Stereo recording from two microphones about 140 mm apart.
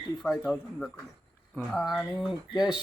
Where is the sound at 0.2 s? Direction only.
Centre (ahead or behind).